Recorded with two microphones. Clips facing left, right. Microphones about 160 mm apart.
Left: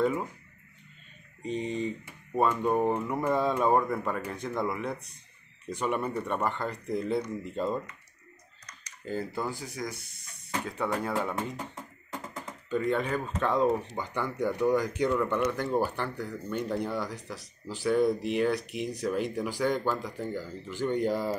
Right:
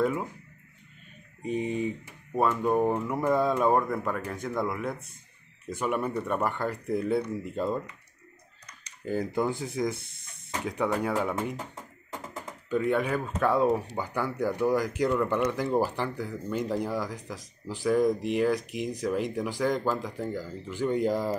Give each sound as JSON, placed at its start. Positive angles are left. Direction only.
{"t": 1.4, "sound": "speech", "side_deg": -10}
{"t": 9.0, "sound": "speech", "side_deg": -15}
{"t": 12.6, "sound": "speech", "side_deg": -10}